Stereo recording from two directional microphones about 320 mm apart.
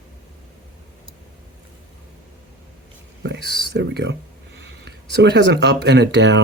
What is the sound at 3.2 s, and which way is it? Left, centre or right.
Speech, right.